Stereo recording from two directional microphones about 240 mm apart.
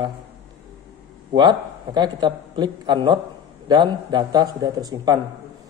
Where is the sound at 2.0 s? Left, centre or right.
Centre.